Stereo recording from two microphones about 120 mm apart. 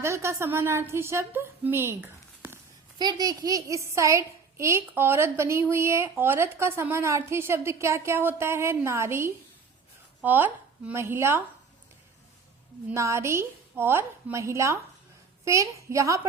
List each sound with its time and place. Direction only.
0.0 s a woman's voice: 25° right (ahead or behind)
3.0 s a child's voice: 35° right (ahead or behind)
12.9 s a child's voice: 25° right (ahead or behind)